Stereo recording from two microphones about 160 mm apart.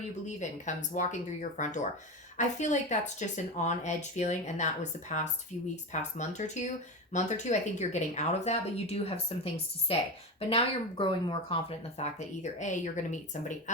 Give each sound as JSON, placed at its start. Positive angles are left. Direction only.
{"t": 0.3, "sound": "speech", "side_deg": 50}
{"t": 10.5, "sound": "speech", "side_deg": 35}